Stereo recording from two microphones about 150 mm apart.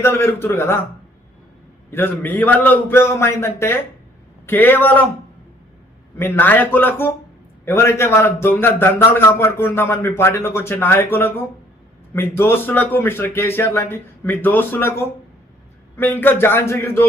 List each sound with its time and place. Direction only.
0.0 s a man's voice: 15° left (ahead or behind)
1.9 s a man's voice: 15° left (ahead or behind)
6.1 s a man's voice: 15° left (ahead or behind)